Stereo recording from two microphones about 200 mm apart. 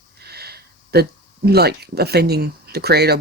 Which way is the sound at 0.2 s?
50° right (ahead or behind).